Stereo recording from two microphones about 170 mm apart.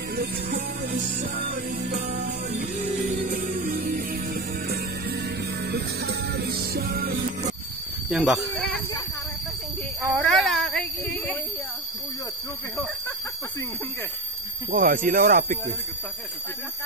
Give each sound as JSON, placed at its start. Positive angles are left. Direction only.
{"t": 0.1, "sound": "music", "side_deg": -65}
{"t": 0.9, "sound": "music", "side_deg": -50}
{"t": 8.1, "sound": "speech", "side_deg": 0}
{"t": 10.1, "sound": "speech", "side_deg": 5}
{"t": 14.7, "sound": "music", "side_deg": -55}